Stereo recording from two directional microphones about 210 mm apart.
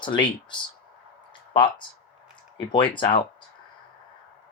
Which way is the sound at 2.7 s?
25° left (ahead or behind).